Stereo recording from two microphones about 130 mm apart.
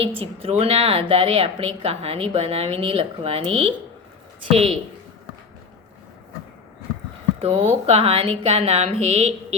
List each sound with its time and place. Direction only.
0.0 s a woman's voice: 45° right (ahead or behind)
7.4 s a woman's voice: 45° right (ahead or behind)